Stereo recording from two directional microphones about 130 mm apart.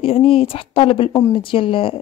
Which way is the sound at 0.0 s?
45° left (ahead or behind).